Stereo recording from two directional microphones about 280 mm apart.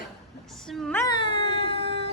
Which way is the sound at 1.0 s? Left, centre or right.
Centre.